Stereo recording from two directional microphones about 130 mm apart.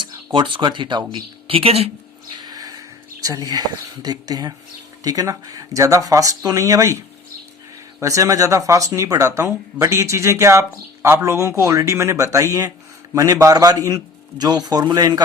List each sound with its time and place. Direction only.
0.0 s speech: 40° right (ahead or behind)
2.4 s speech: 30° right (ahead or behind)
8.0 s speech: 25° right (ahead or behind)